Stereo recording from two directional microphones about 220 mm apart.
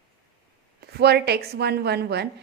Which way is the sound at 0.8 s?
45° right (ahead or behind).